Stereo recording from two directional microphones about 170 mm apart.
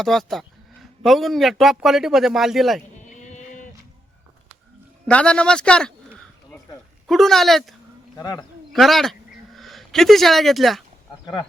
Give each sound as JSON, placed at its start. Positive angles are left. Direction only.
{"t": 0.0, "sound": "a man's voice", "side_deg": 0}
{"t": 3.2, "sound": "a sound", "side_deg": 45}
{"t": 5.0, "sound": "a man's voice", "side_deg": 5}
{"t": 7.1, "sound": "a man's voice", "side_deg": 0}
{"t": 8.2, "sound": "a man's voice", "side_deg": 25}
{"t": 8.7, "sound": "speech", "side_deg": 0}